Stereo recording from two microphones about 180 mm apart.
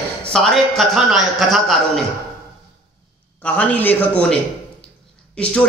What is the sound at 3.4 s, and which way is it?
A man's voice, 10° left (ahead or behind).